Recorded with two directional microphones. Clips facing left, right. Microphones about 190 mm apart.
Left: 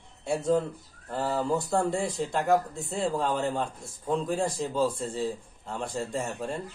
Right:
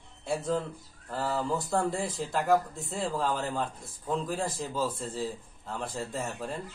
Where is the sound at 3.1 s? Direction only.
20° left (ahead or behind).